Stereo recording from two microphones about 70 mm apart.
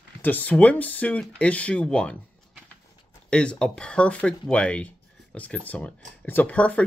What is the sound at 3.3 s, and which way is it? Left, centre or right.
Speech, centre.